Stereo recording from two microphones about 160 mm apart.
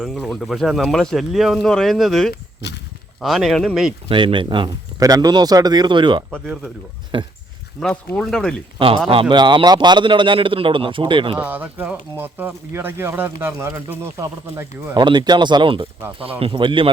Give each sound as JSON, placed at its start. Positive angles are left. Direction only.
{"t": 0.0, "sound": "speech", "side_deg": 0}
{"t": 2.3, "sound": "a sound", "side_deg": 90}
{"t": 3.2, "sound": "speech", "side_deg": 0}
{"t": 4.1, "sound": "a man's voice", "side_deg": -30}
{"t": 7.8, "sound": "speech", "side_deg": 5}
{"t": 9.3, "sound": "a man's voice", "side_deg": -30}
{"t": 11.3, "sound": "speech", "side_deg": -10}
{"t": 14.9, "sound": "a man's voice", "side_deg": -30}